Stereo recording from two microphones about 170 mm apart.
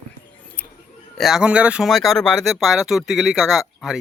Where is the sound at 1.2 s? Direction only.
5° right (ahead or behind).